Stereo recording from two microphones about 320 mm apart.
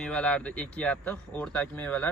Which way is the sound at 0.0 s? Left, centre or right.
Centre.